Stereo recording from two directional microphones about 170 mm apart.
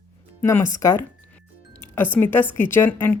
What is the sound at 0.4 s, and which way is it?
A woman's voice, 15° left (ahead or behind).